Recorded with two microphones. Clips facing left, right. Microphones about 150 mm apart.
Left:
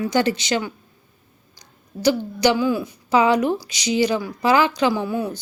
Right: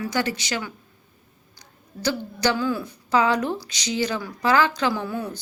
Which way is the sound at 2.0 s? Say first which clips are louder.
Left 6 dB; 15° left (ahead or behind).